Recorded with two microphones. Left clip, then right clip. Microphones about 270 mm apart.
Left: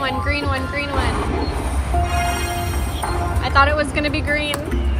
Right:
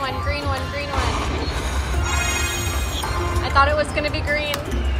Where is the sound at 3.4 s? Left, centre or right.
Left.